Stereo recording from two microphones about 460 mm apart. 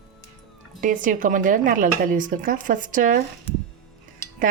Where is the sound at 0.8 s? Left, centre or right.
Centre.